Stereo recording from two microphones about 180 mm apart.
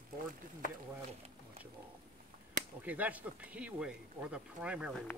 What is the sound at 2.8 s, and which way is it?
Speech, 10° right (ahead or behind).